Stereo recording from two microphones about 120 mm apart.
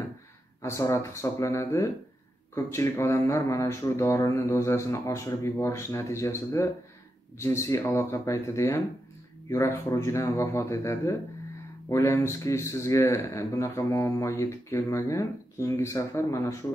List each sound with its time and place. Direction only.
0.6 s speech: 25° left (ahead or behind)